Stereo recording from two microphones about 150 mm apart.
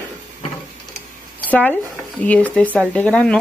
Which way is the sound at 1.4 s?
10° left (ahead or behind).